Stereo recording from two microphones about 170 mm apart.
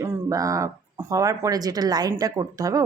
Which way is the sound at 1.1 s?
20° right (ahead or behind).